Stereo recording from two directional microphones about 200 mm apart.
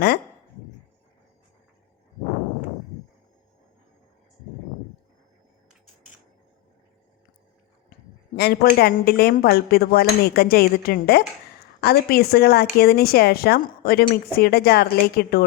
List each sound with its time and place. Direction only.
8.4 s speech: 50° left (ahead or behind)